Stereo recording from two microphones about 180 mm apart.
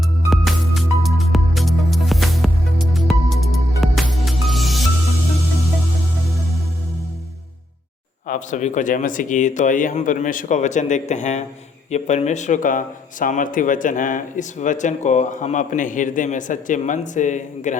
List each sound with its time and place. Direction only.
0.3 s music: centre (ahead or behind)
8.3 s speech: 45° left (ahead or behind)